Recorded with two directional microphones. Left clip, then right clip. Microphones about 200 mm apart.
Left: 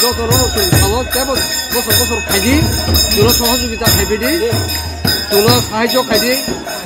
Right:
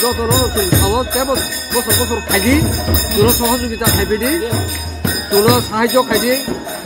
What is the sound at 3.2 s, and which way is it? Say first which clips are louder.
Speech: left 2 dB; centre (ahead or behind).